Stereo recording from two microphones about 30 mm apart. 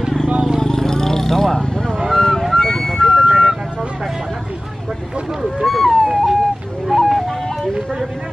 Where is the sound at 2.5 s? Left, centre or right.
Centre.